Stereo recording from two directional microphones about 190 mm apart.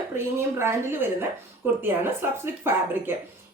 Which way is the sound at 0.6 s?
10° right (ahead or behind).